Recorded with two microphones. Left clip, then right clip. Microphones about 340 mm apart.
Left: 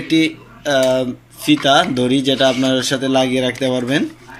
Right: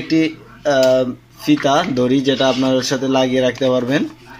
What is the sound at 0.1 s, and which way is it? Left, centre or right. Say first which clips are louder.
Speech: left 1 dB; right.